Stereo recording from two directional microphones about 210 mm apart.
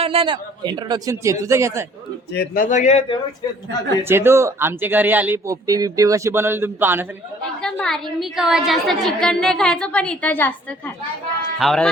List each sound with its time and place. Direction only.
0.0 s speech: 25° right (ahead or behind)
2.3 s speech: 45° left (ahead or behind); by 3.2 s 30° left (ahead or behind)
4.1 s speech: 10° right (ahead or behind)
7.6 s a woman's voice: centre (ahead or behind)